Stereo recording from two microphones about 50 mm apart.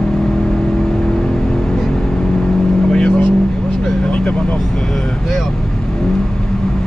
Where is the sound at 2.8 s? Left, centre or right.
Centre.